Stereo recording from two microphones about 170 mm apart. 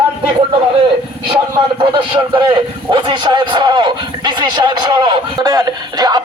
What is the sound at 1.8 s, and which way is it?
A man's voice, 25° right (ahead or behind).